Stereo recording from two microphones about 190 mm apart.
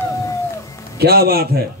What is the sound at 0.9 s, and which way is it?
Speech, 55° right (ahead or behind).